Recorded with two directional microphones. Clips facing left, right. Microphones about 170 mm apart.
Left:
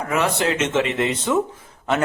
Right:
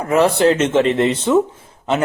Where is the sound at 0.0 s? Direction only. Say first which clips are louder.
Right 7 dB; 35° right (ahead or behind).